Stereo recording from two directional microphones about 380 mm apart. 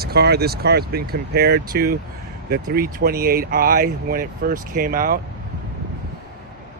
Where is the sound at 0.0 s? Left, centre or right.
Right.